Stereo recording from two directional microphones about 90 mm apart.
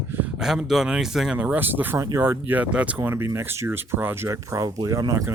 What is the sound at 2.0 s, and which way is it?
Speech, 35° right (ahead or behind).